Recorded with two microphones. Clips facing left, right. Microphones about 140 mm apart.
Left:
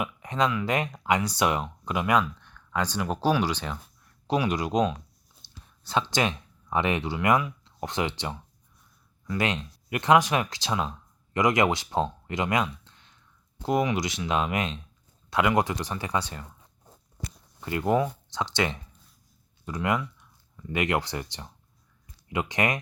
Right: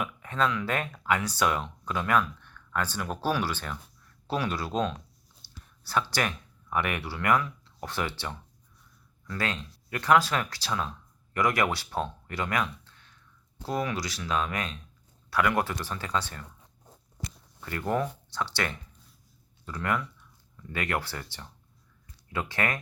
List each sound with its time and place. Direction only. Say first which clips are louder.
0.0 s speech: left 2 dB; 15° left (ahead or behind)
17.6 s speech: left 5 dB; 20° left (ahead or behind)